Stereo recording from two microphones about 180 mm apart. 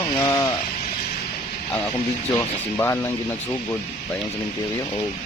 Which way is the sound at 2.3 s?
15° left (ahead or behind).